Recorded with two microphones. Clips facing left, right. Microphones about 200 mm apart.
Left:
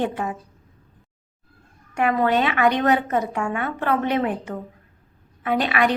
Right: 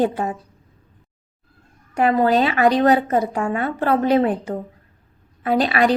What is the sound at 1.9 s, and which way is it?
A woman's voice, 35° right (ahead or behind).